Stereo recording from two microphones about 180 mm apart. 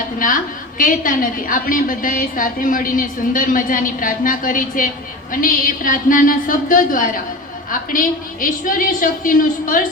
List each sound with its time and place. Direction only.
0.8 s a woman's voice: 50° left (ahead or behind)